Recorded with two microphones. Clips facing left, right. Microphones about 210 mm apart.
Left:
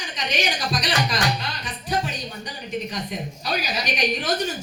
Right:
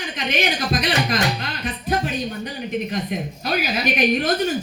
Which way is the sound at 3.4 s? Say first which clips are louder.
Right 5 dB; 55° right (ahead or behind).